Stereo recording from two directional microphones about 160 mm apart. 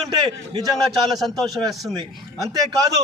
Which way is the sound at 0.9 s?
Centre (ahead or behind).